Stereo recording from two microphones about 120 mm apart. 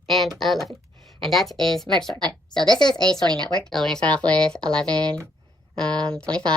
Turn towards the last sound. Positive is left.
turn(degrees=10)  # may be behind; listen again after turning